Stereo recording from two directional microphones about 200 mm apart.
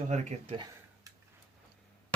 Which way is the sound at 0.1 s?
35° right (ahead or behind).